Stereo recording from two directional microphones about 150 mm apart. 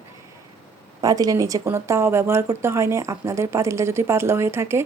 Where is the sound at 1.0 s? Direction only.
25° right (ahead or behind).